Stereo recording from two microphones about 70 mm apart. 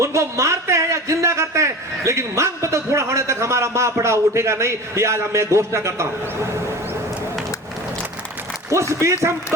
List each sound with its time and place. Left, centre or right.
0.0 s speech: right
8.7 s a man's voice: right